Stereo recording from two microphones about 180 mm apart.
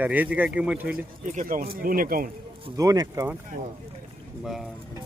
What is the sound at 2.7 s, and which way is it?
Speech, 20° right (ahead or behind).